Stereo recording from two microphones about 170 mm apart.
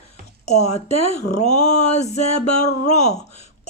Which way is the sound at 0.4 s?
40° left (ahead or behind).